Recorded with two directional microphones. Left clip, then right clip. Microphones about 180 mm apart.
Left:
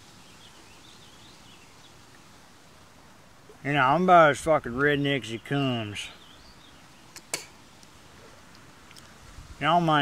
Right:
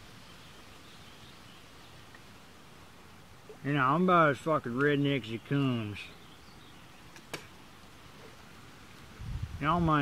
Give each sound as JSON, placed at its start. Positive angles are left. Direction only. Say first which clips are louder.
{"t": 3.6, "sound": "speech", "louder": "left 6 dB", "side_deg": 20}
{"t": 9.6, "sound": "speech", "louder": "left 7 dB", "side_deg": 20}